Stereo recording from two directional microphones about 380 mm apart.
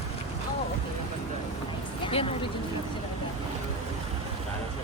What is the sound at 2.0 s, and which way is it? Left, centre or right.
Speech, centre.